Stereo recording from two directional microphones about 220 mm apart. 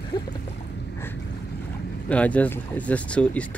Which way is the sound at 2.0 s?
5° left (ahead or behind).